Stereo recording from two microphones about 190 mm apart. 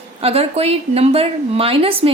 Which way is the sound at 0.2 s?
30° right (ahead or behind).